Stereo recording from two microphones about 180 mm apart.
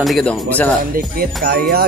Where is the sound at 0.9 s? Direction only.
55° right (ahead or behind).